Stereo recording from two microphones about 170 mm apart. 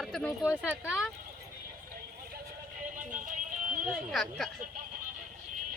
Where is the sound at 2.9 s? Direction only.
50° right (ahead or behind).